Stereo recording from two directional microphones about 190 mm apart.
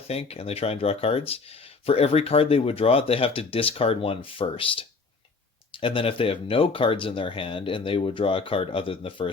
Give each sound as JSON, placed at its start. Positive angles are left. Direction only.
{"t": 0.1, "sound": "speech", "side_deg": 30}